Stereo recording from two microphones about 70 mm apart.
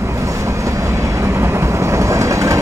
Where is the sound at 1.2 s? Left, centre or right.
Right.